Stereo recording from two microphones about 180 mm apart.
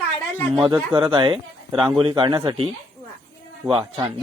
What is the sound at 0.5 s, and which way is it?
Speech, 25° right (ahead or behind).